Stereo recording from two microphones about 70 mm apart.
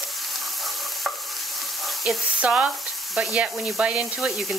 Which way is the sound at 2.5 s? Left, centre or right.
Centre.